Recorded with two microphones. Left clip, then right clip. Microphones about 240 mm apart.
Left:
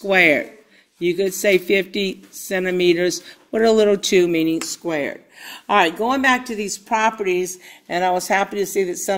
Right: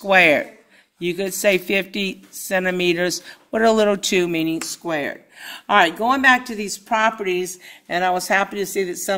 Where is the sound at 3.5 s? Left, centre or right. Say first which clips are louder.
Left 1 dB; right.